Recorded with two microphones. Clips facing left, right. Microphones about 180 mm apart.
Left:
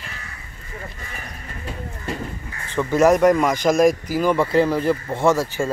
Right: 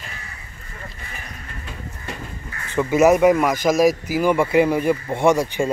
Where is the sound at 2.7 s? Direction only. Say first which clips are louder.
Right 1 dB; 10° right (ahead or behind).